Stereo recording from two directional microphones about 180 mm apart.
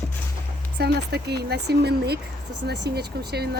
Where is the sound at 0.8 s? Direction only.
65° right (ahead or behind).